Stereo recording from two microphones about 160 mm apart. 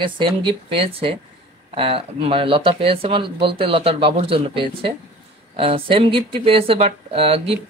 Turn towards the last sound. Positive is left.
turn(degrees=-35)  # may be behind; listen again after turning